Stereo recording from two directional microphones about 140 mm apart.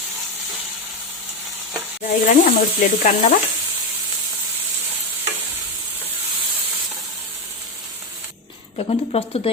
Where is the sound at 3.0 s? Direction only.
70° left (ahead or behind).